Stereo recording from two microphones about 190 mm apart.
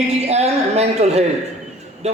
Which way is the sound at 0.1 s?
35° right (ahead or behind).